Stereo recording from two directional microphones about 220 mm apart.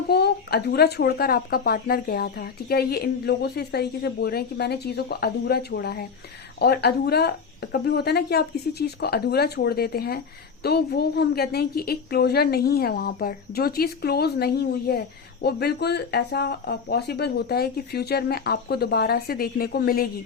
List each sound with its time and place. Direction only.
0.1 s a woman's voice: 45° left (ahead or behind)